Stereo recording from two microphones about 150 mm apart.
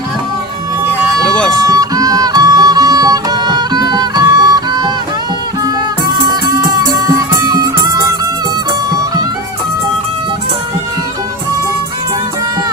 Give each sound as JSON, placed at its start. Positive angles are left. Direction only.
{"t": 1.3, "sound": "music", "side_deg": 5}
{"t": 1.6, "sound": "music", "side_deg": -25}
{"t": 6.2, "sound": "music", "side_deg": -25}